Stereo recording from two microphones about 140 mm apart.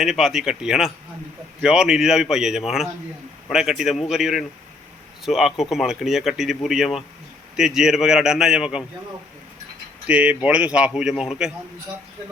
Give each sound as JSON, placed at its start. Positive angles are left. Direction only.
{"t": 0.0, "sound": "speech", "side_deg": 0}
{"t": 10.1, "sound": "speech", "side_deg": -10}